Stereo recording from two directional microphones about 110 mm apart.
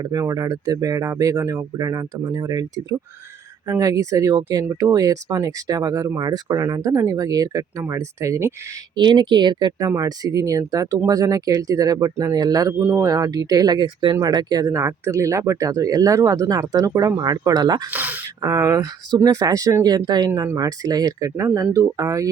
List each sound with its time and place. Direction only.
0.0 s speech: 35° right (ahead or behind)
9.0 s speech: 45° right (ahead or behind)
17.9 s speech: 15° right (ahead or behind)
18.4 s speech: 35° right (ahead or behind)